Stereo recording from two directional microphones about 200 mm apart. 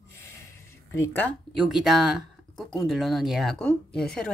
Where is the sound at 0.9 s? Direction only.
10° left (ahead or behind).